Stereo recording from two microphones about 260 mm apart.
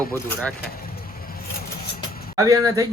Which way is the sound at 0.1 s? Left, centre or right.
Centre.